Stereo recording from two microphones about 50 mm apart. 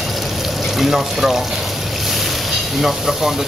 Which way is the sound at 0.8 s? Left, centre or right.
Centre.